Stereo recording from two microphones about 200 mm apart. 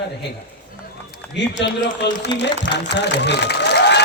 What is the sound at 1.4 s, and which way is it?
Speech, 60° left (ahead or behind).